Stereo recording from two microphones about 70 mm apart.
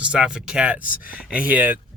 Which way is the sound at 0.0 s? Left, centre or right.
Centre.